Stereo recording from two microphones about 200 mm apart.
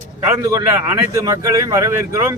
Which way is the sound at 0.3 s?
15° right (ahead or behind).